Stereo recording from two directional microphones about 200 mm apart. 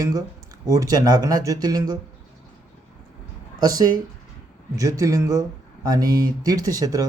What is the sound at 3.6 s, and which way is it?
Speech, 20° right (ahead or behind).